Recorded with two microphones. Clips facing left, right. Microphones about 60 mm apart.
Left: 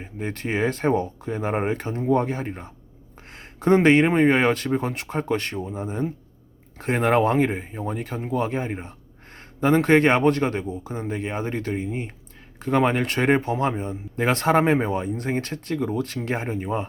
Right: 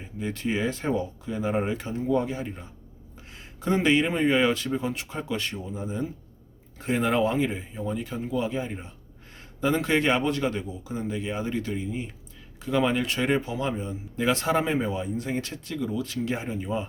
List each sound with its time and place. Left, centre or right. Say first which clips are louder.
0.0 s speech: left 1 dB; left